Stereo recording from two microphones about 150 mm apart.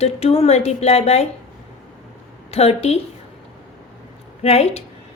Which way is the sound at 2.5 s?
40° left (ahead or behind).